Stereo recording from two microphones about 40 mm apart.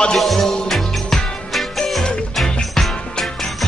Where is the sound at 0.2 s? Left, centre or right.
Centre.